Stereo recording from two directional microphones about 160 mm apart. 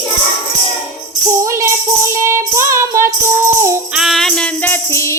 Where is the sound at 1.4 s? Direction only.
15° right (ahead or behind).